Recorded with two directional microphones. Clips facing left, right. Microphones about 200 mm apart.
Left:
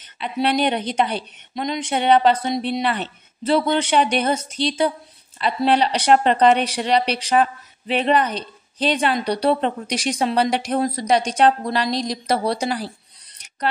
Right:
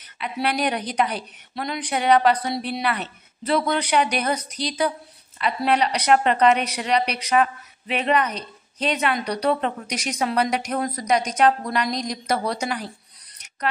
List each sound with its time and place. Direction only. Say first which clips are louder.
0.0 s speech: left 4 dB; 25° left (ahead or behind)